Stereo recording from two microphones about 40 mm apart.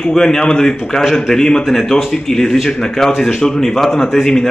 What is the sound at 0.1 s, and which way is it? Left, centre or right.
Speech, centre.